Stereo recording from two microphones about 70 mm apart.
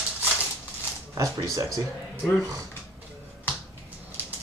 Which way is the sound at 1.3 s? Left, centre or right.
Right.